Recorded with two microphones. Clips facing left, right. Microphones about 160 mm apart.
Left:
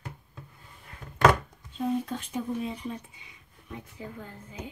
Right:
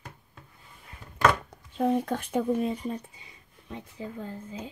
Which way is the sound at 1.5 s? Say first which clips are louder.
Right 4 dB; 65° right (ahead or behind).